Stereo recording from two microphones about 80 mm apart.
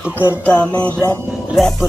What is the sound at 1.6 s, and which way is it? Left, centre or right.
Speech, centre.